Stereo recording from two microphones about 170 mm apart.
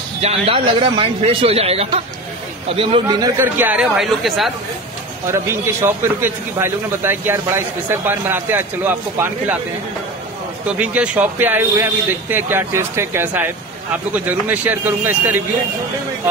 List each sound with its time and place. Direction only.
0.2 s a man's voice: 35° right (ahead or behind)
3.5 s speech: 10° right (ahead or behind)
5.3 s a man's voice: 15° right (ahead or behind)
10.8 s a man's voice: 5° right (ahead or behind)